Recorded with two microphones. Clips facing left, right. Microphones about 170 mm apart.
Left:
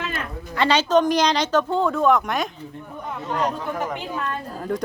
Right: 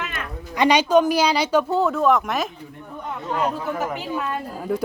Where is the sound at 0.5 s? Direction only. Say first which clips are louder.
Right 2 dB; 15° right (ahead or behind).